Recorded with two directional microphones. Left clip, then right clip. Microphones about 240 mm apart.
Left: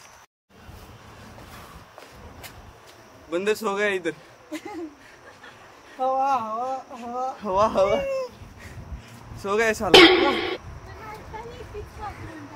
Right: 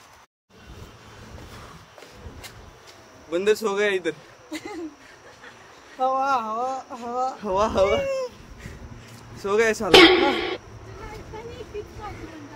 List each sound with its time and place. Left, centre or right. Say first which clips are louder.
3.3 s speech: right 3 dB; centre
4.5 s a sound: right 1 dB; centre
5.9 s speech: even; centre
7.3 s speech: left 2 dB; centre
9.4 s speech: right 1 dB; centre